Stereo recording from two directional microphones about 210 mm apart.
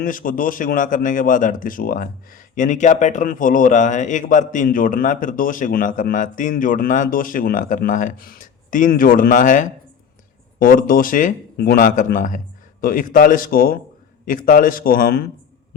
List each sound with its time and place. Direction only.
0.0 s a man's voice: 40° left (ahead or behind)